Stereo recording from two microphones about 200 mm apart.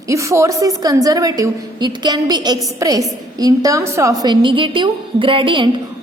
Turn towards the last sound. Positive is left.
turn(degrees=-25)  # may be behind; listen again after turning